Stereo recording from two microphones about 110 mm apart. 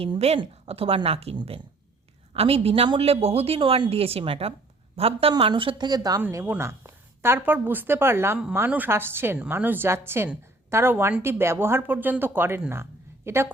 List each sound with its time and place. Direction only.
0.3 s speech: 60° right (ahead or behind); by 6.2 s 35° right (ahead or behind)
6.4 s speech: 20° right (ahead or behind)